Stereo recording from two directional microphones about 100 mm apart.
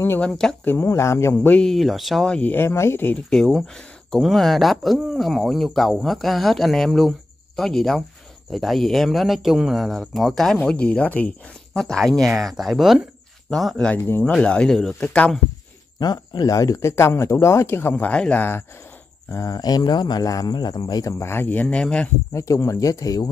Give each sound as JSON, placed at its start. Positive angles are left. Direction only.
{"t": 0.2, "sound": "speech", "side_deg": 5}
{"t": 0.7, "sound": "speech", "side_deg": 25}
{"t": 1.3, "sound": "speech", "side_deg": 15}
{"t": 1.7, "sound": "speech", "side_deg": 0}
{"t": 3.3, "sound": "speech", "side_deg": 5}
{"t": 13.9, "sound": "speech", "side_deg": 20}
{"t": 14.3, "sound": "speech", "side_deg": 10}
{"t": 16.0, "sound": "speech", "side_deg": 40}
{"t": 19.3, "sound": "speech", "side_deg": 40}
{"t": 22.3, "sound": "speech", "side_deg": 30}